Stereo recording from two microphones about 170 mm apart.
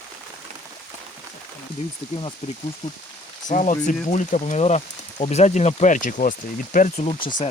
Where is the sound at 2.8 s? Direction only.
45° left (ahead or behind).